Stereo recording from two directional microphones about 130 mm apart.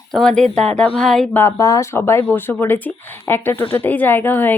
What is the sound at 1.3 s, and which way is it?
Speech, 20° left (ahead or behind).